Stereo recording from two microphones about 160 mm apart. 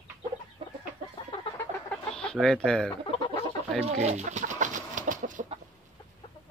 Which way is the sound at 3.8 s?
45° right (ahead or behind).